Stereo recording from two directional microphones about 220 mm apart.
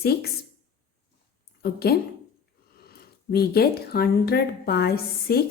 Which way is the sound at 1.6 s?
45° left (ahead or behind).